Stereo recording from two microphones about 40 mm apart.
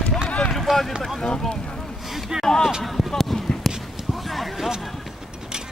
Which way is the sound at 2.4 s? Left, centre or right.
Centre.